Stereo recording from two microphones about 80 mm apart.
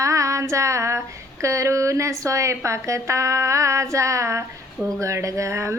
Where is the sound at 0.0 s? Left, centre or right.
Right.